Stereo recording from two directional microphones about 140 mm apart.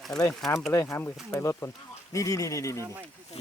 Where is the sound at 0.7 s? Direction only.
20° left (ahead or behind).